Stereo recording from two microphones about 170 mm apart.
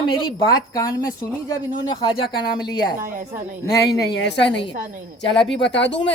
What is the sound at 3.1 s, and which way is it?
Speech, 50° right (ahead or behind).